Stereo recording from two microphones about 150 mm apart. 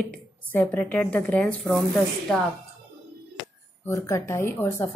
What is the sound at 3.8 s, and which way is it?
A woman's voice, 15° left (ahead or behind).